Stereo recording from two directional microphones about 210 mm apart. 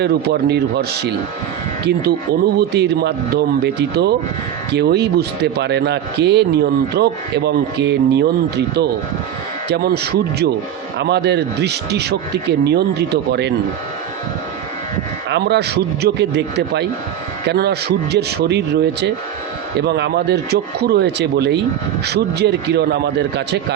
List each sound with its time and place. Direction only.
0.0 s a man's voice: 50° right (ahead or behind)
15.3 s a man's voice: 50° right (ahead or behind)